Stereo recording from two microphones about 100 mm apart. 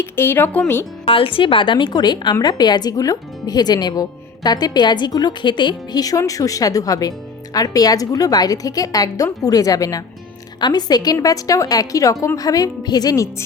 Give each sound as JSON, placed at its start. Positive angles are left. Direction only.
{"t": 0.0, "sound": "speech", "side_deg": 25}
{"t": 1.0, "sound": "a woman's voice", "side_deg": 65}
{"t": 6.0, "sound": "a woman's voice", "side_deg": 35}